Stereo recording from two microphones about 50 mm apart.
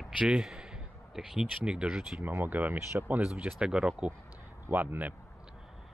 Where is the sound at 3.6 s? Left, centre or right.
Centre.